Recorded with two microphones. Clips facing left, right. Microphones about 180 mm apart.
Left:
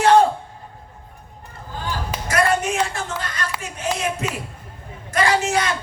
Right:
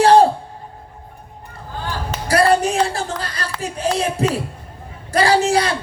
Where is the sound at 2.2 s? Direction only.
35° right (ahead or behind).